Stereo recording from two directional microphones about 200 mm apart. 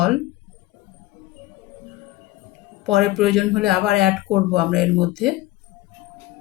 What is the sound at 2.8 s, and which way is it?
Speech, centre (ahead or behind).